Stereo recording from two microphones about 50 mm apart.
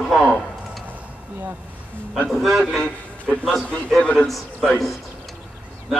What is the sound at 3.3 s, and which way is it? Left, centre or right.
Speech, centre.